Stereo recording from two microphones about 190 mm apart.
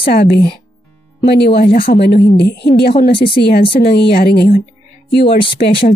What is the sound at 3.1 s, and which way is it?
Speech, 30° left (ahead or behind).